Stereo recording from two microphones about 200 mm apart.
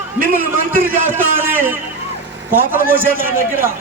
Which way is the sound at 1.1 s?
10° right (ahead or behind).